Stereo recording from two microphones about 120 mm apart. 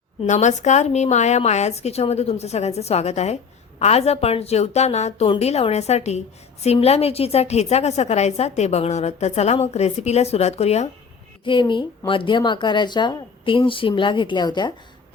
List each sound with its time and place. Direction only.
0.3 s a woman's voice: 80° left; by 10.8 s 65° left (ahead or behind)
11.4 s a woman's voice: 45° left (ahead or behind)